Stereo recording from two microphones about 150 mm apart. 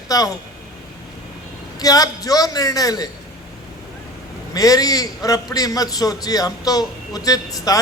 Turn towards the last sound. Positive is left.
turn(degrees=25)  # may be behind; listen again after turning